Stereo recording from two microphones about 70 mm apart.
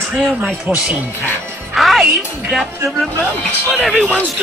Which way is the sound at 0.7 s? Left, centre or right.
Centre.